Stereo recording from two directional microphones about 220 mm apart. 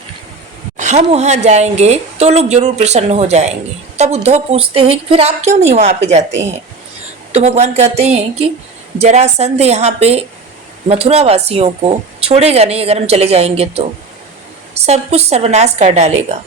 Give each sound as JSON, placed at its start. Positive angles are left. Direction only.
{"t": 0.8, "sound": "a woman's voice", "side_deg": -30}
{"t": 7.3, "sound": "speech", "side_deg": -30}